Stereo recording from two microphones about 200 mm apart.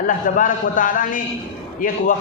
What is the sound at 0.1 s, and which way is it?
A man's voice, 40° left (ahead or behind).